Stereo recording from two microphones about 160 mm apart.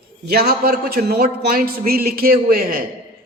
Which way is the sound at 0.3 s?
70° right (ahead or behind).